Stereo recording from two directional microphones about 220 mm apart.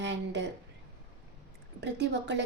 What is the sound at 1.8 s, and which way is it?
Speech, 50° right (ahead or behind).